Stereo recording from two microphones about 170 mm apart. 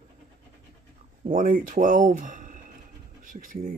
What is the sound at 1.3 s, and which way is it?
Speech, 50° right (ahead or behind).